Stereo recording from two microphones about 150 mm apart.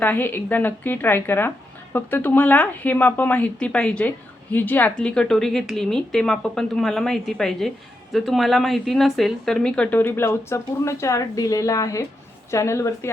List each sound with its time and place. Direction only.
0.0 s a woman's voice: 10° left (ahead or behind)